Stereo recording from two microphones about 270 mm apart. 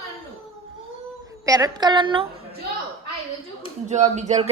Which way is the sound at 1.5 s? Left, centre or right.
Centre.